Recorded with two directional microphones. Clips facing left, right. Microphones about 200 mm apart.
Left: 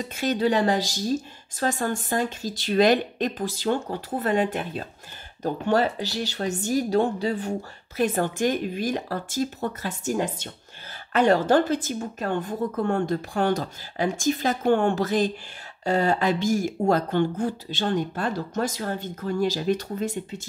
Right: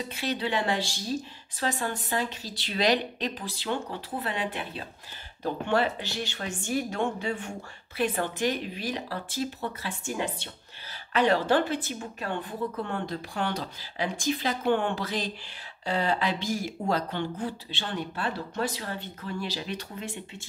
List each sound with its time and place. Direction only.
0.1 s speech: 45° left (ahead or behind)